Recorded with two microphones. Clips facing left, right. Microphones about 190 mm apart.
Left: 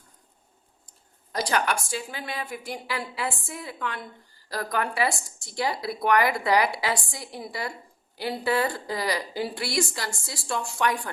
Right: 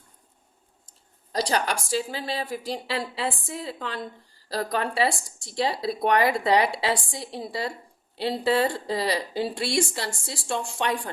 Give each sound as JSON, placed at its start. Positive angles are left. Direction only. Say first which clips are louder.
{"t": 1.3, "sound": "a woman's voice", "louder": "right 1 dB", "side_deg": -35}